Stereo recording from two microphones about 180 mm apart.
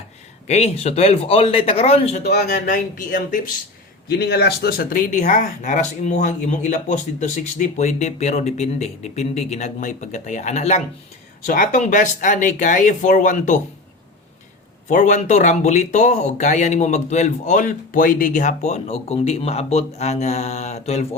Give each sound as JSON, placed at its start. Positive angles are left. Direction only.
{"t": 0.4, "sound": "speech", "side_deg": 35}
{"t": 4.1, "sound": "speech", "side_deg": 65}
{"t": 11.4, "sound": "speech", "side_deg": 50}
{"t": 14.8, "sound": "speech", "side_deg": 40}